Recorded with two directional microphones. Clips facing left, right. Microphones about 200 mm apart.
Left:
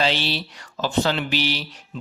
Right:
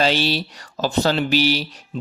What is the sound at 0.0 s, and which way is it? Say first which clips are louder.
Speech: right 4 dB; 40° right (ahead or behind).